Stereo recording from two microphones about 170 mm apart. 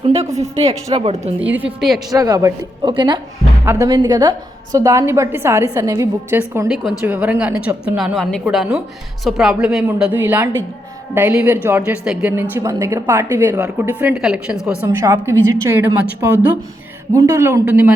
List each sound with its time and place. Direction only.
0.0 s a woman's voice: 35° right (ahead or behind)
1.5 s a woman's voice: 10° right (ahead or behind)
2.0 s a woman's voice: 20° right (ahead or behind); by 14.8 s 5° right (ahead or behind)
14.8 s a woman's voice: 20° right (ahead or behind)